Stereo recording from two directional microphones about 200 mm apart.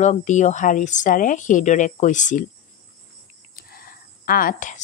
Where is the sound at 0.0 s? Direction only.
35° left (ahead or behind).